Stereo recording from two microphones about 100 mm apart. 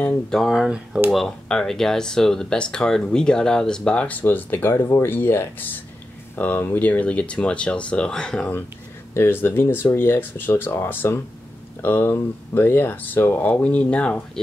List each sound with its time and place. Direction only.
0.3 s speech: centre (ahead or behind)
9.1 s speech: 25° left (ahead or behind)